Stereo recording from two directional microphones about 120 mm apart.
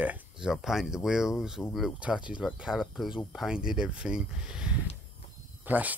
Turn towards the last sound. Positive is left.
turn(degrees=-15)  # may be behind; listen again after turning